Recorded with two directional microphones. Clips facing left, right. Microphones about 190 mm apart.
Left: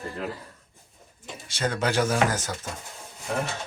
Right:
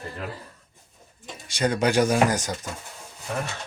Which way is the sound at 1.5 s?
15° right (ahead or behind).